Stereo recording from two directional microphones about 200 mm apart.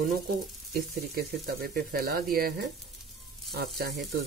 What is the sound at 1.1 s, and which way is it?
Speech, 50° right (ahead or behind).